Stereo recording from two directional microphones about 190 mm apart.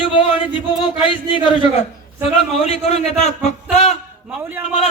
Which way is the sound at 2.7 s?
30° left (ahead or behind).